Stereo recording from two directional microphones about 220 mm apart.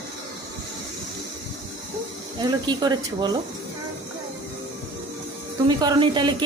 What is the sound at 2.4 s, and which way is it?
Speech, 20° right (ahead or behind).